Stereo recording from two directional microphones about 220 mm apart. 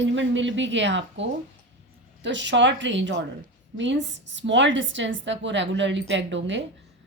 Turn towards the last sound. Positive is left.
turn(degrees=-55)  # may be behind; listen again after turning